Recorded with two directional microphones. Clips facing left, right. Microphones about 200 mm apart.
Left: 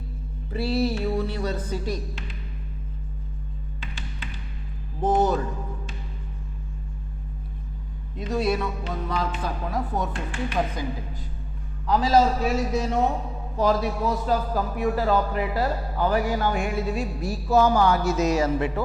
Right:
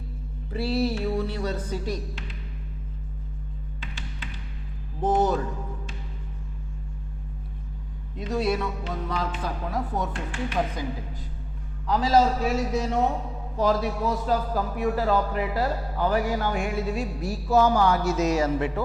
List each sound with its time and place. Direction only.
0.5 s speech: 10° left (ahead or behind)
3.8 s music: 15° left (ahead or behind)
5.0 s a man's voice: 10° left (ahead or behind)
8.2 s a man's voice: 10° left (ahead or behind)
13.6 s a man's voice: 10° left (ahead or behind)